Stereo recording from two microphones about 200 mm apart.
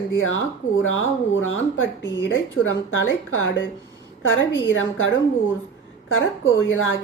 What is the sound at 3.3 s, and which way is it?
Speech, 80° left.